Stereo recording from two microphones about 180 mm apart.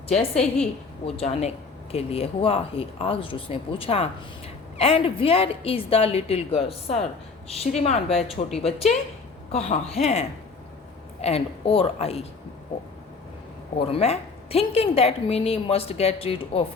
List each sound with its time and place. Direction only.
0.2 s a woman's voice: 35° left (ahead or behind)
9.5 s a woman's voice: 35° left (ahead or behind)
13.7 s a woman's voice: 30° left (ahead or behind)